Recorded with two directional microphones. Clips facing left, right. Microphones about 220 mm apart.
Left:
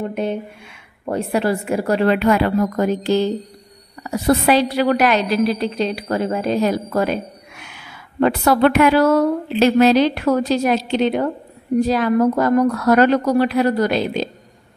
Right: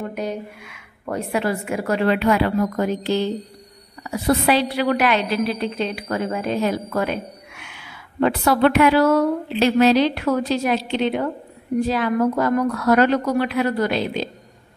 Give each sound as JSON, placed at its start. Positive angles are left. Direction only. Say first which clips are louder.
{"t": 0.1, "sound": "a woman's voice", "louder": "left 4 dB", "side_deg": 25}